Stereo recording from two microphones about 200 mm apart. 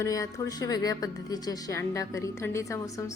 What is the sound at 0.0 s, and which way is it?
A woman's voice, 15° left (ahead or behind).